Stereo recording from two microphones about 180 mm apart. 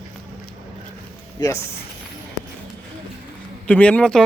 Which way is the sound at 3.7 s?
5° left (ahead or behind).